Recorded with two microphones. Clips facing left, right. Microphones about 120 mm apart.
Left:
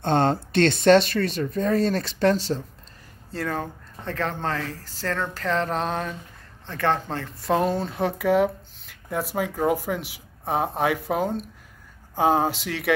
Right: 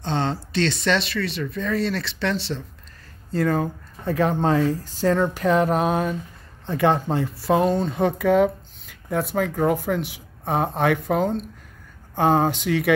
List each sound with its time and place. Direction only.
0.0 s speech: 50° left (ahead or behind)
3.3 s speech: centre (ahead or behind)
7.4 s speech: centre (ahead or behind)